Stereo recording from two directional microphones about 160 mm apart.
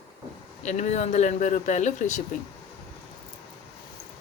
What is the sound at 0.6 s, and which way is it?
Speech, 45° left (ahead or behind).